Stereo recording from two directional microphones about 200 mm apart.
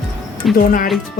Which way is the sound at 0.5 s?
45° left (ahead or behind).